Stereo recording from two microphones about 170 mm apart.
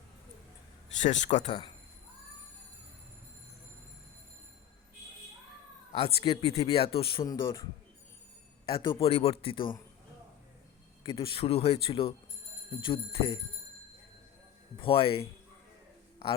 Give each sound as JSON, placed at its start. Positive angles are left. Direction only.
{"t": 0.9, "sound": "speech", "side_deg": 45}
{"t": 5.9, "sound": "speech", "side_deg": 30}
{"t": 8.7, "sound": "speech", "side_deg": 30}
{"t": 11.0, "sound": "speech", "side_deg": 30}
{"t": 14.8, "sound": "speech", "side_deg": 35}